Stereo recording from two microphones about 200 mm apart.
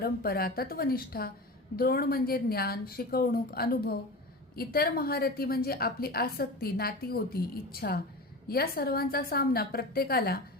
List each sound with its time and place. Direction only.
0.0 s a woman's voice: 50° left (ahead or behind)